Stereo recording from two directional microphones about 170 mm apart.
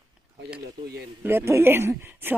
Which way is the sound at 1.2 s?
15° right (ahead or behind).